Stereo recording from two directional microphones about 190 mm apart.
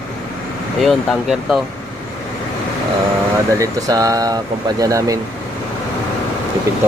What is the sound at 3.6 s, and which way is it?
Speech, 20° right (ahead or behind).